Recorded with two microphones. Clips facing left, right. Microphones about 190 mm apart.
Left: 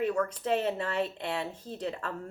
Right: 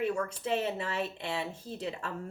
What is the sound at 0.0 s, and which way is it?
Speech, 10° right (ahead or behind).